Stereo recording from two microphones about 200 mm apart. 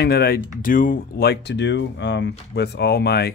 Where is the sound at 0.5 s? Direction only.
45° left (ahead or behind).